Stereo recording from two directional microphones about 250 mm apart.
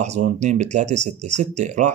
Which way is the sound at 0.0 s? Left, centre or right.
Right.